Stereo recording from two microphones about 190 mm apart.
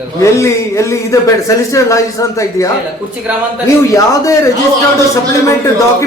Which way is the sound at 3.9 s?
15° left (ahead or behind).